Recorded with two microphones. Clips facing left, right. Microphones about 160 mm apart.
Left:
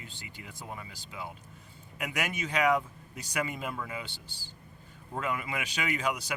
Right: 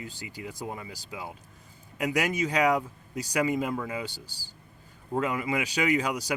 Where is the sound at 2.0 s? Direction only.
40° right (ahead or behind).